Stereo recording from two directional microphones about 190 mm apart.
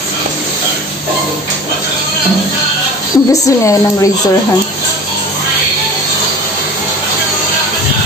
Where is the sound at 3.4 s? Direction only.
15° left (ahead or behind).